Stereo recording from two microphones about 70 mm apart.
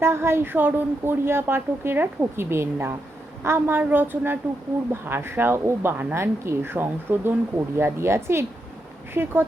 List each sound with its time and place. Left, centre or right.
0.0 s a woman's voice: right